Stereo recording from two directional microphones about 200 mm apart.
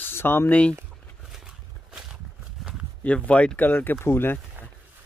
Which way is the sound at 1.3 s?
5° right (ahead or behind).